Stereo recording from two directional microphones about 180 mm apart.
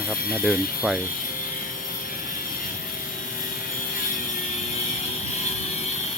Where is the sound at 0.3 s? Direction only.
Centre (ahead or behind).